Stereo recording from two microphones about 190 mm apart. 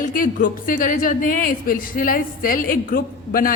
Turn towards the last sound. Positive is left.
turn(degrees=50)  # may be behind; listen again after turning